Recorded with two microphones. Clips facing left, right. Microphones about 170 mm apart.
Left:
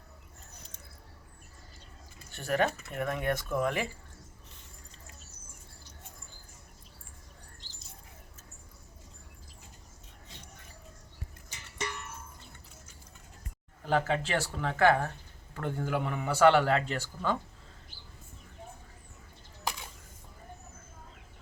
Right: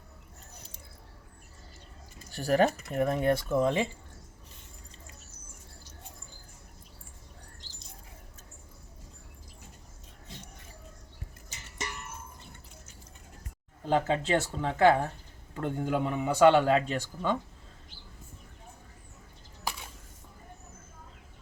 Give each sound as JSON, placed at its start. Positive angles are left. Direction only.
{"t": 2.3, "sound": "speech", "side_deg": -35}
{"t": 13.8, "sound": "speech", "side_deg": -20}